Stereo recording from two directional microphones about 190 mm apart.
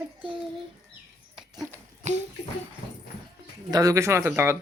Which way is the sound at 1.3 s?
Centre (ahead or behind).